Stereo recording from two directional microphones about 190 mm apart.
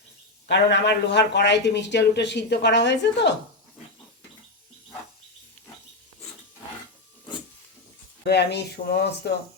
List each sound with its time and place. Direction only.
0.4 s a man's voice: 65° left (ahead or behind)
8.2 s a man's voice: 60° left (ahead or behind)